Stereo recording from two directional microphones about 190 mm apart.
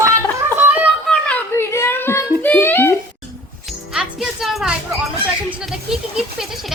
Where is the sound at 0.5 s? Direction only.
10° right (ahead or behind).